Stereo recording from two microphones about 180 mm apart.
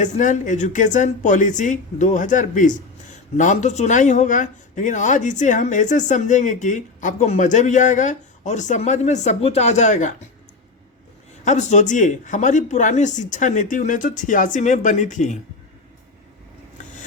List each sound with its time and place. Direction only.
0.0 s speech: 45° left (ahead or behind)
11.4 s speech: 40° left (ahead or behind)